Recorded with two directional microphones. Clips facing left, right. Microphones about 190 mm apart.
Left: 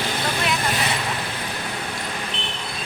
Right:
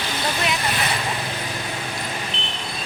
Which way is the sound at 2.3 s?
60° left (ahead or behind).